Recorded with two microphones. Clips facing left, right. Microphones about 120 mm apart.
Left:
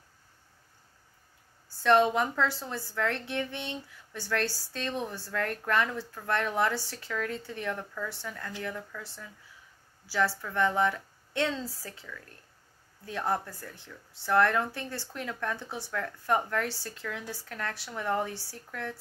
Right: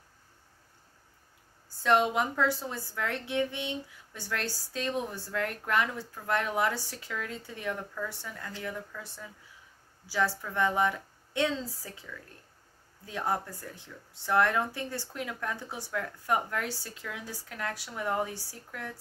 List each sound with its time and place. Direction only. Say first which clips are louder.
1.8 s a woman's voice: left 2 dB; 10° right (ahead or behind)
13.0 s a woman's voice: left 1 dB; 15° right (ahead or behind)